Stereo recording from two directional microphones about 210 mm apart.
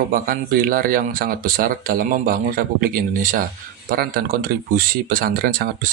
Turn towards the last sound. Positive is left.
turn(degrees=-45)  # may be behind; listen again after turning